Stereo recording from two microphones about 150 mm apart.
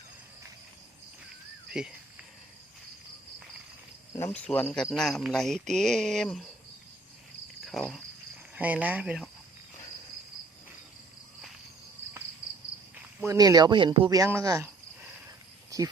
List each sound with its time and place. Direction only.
1.7 s speech: 5° right (ahead or behind)
4.3 s speech: 5° left (ahead or behind)
7.6 s cricket: centre (ahead or behind)
8.5 s speech: 10° right (ahead or behind)
13.2 s speech: 25° right (ahead or behind)
14.2 s speech: 20° right (ahead or behind)
15.7 s speech: 25° right (ahead or behind)